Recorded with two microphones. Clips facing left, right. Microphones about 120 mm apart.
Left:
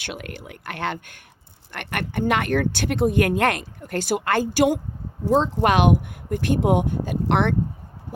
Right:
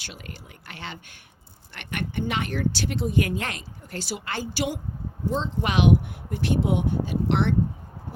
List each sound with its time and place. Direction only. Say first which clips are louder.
0.0 s speech: left 8 dB; 65° left (ahead or behind)